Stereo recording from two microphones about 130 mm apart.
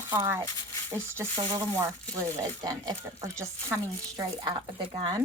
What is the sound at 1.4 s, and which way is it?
Speech, 40° right (ahead or behind).